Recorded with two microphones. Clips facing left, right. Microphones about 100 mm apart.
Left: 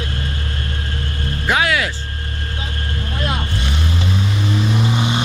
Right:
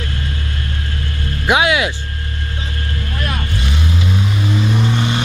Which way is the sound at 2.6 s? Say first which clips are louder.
Right 1 dB; 35° left (ahead or behind).